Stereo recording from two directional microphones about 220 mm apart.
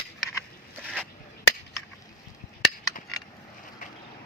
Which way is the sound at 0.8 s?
5° left (ahead or behind).